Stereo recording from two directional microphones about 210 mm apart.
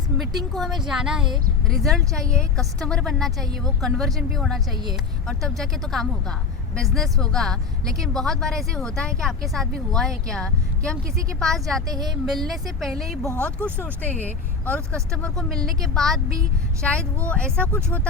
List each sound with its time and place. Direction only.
0.2 s a woman's voice: centre (ahead or behind)
11.9 s a woman's voice: 20° right (ahead or behind)
12.2 s a woman's voice: centre (ahead or behind)